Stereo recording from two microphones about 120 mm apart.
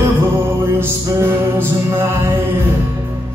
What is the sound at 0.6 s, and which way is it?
Music, 20° right (ahead or behind).